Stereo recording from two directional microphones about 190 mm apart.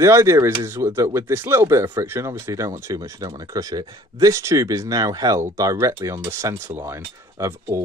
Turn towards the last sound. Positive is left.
turn(degrees=-15)  # may be behind; listen again after turning